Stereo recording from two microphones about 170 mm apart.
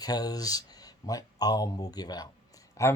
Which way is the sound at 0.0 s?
20° left (ahead or behind).